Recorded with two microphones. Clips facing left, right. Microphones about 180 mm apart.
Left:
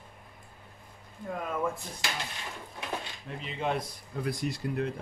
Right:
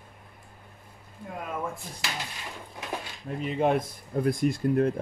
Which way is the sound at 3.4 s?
50° right (ahead or behind).